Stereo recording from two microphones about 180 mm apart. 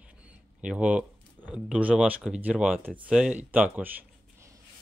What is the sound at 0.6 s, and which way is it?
Speech, 5° right (ahead or behind).